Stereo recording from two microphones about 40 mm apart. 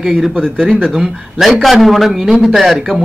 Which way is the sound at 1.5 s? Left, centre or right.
Centre.